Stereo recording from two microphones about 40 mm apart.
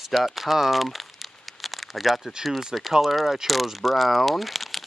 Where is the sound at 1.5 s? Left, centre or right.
Centre.